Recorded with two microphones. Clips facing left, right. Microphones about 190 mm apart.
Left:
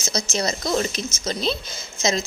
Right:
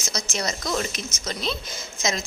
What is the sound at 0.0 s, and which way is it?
Speech, 30° left (ahead or behind).